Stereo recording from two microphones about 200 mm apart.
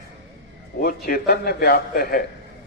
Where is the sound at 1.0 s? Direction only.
50° left (ahead or behind).